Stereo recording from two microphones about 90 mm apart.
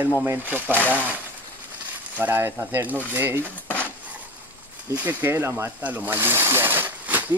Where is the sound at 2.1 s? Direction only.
25° right (ahead or behind).